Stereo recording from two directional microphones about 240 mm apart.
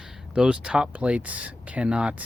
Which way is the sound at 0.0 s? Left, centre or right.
Centre.